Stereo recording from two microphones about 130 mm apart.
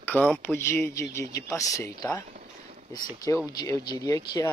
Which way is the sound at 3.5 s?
30° left (ahead or behind).